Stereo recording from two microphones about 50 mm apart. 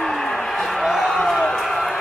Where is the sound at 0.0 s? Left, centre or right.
Centre.